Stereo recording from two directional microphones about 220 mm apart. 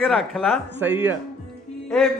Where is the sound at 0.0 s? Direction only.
Centre (ahead or behind).